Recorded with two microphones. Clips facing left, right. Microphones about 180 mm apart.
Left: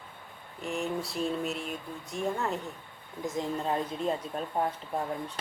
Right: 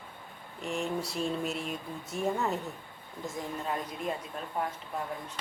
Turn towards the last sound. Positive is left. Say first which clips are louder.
# left 4 dB
turn(degrees=30)  # may be behind; listen again after turning